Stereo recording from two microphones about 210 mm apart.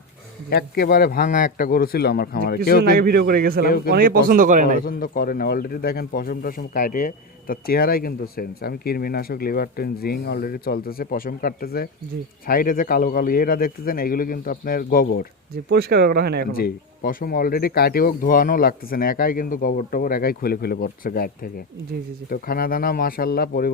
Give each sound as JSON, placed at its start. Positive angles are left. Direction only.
{"t": 0.5, "sound": "a man's voice", "side_deg": 45}
{"t": 3.0, "sound": "speech", "side_deg": -50}
{"t": 4.9, "sound": "a man's voice", "side_deg": 40}
{"t": 15.7, "sound": "speech", "side_deg": -50}
{"t": 16.5, "sound": "a man's voice", "side_deg": 45}